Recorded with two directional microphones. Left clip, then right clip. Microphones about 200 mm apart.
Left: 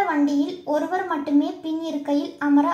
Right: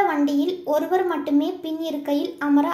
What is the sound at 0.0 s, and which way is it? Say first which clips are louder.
A child's voice: right 1 dB; 20° right (ahead or behind).